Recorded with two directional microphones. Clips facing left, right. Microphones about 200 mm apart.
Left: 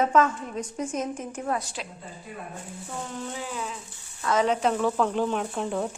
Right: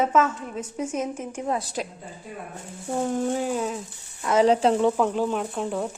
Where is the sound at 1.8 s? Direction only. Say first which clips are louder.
Right 6 dB; 45° right (ahead or behind).